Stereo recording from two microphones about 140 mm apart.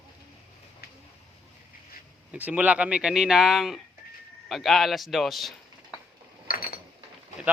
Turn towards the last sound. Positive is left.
turn(degrees=90)